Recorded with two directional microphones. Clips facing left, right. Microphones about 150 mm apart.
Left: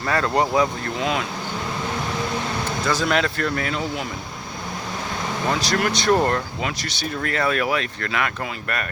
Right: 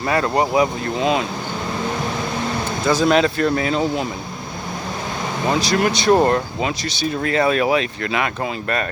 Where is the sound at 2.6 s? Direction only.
15° right (ahead or behind).